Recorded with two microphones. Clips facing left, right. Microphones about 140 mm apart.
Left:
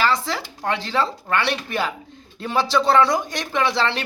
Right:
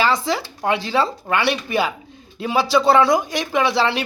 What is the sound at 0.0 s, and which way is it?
Speech, 15° right (ahead or behind).